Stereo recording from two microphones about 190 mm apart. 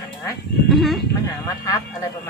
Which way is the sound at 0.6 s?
Centre (ahead or behind).